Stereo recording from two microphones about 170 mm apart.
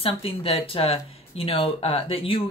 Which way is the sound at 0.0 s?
35° left (ahead or behind).